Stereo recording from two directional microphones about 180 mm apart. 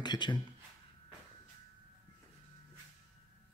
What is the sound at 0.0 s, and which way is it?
Speech, 25° left (ahead or behind).